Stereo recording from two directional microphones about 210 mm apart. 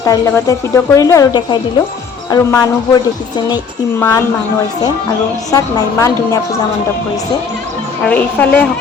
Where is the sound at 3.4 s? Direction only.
20° left (ahead or behind).